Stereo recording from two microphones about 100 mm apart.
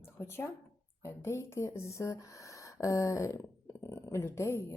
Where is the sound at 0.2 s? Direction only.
25° left (ahead or behind).